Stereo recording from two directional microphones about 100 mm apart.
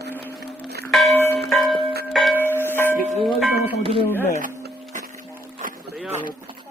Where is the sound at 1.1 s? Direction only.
25° left (ahead or behind).